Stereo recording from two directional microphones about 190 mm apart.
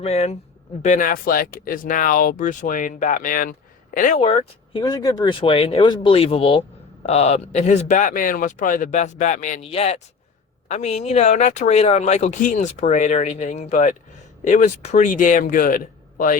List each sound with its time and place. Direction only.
0.0 s speech: 35° left (ahead or behind)
4.2 s speech: 30° left (ahead or behind); by 16.4 s 45° left (ahead or behind)